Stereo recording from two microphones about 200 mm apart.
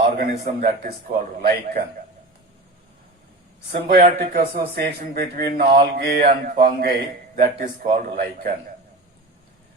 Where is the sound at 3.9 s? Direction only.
50° right (ahead or behind).